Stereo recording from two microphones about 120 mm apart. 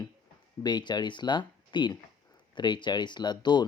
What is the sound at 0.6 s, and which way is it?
Speech, 35° left (ahead or behind).